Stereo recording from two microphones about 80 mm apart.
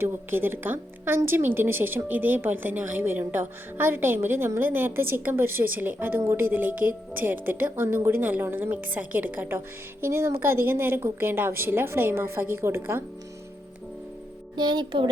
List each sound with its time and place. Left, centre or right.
0.0 s a woman's voice: right
10.0 s a woman's voice: right
14.5 s speech: right